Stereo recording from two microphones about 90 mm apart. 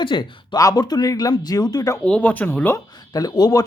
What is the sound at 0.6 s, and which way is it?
Speech, 45° left (ahead or behind).